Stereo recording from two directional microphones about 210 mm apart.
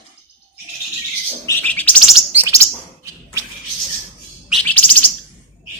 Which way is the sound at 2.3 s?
10° right (ahead or behind).